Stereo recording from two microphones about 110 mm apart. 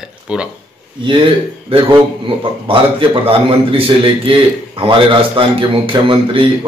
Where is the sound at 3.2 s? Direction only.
55° right (ahead or behind).